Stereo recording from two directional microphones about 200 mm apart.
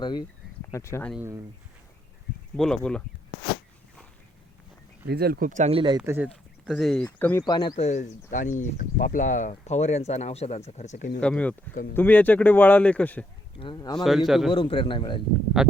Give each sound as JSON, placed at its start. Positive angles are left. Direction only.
{"t": 0.0, "sound": "a man's voice", "side_deg": 20}
{"t": 1.1, "sound": "speech", "side_deg": -10}
{"t": 2.6, "sound": "a man's voice", "side_deg": 5}
{"t": 5.0, "sound": "speech", "side_deg": -50}
{"t": 6.0, "sound": "speech", "side_deg": -10}
{"t": 7.4, "sound": "a man's voice", "side_deg": 20}
{"t": 7.9, "sound": "speech", "side_deg": 35}
{"t": 11.2, "sound": "a man's voice", "side_deg": 5}
{"t": 13.6, "sound": "a man's voice", "side_deg": 20}
{"t": 14.0, "sound": "a man's voice", "side_deg": 0}
{"t": 14.5, "sound": "a man's voice", "side_deg": 25}
{"t": 15.6, "sound": "a man's voice", "side_deg": 0}